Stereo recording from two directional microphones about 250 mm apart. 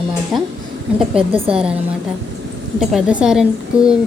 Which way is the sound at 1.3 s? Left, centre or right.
Right.